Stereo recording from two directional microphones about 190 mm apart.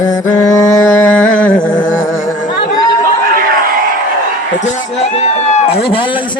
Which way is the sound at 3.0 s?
50° right (ahead or behind).